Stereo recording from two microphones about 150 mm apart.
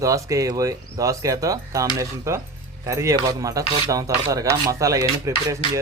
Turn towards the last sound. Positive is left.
turn(degrees=-20)  # may be behind; listen again after turning